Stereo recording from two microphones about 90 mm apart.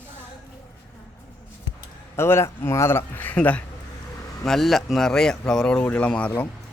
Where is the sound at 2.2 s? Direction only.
30° left (ahead or behind).